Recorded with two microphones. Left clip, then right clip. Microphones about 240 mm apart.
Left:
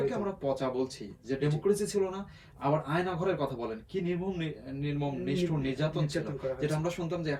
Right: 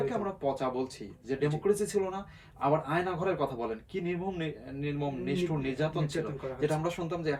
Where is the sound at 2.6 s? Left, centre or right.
Centre.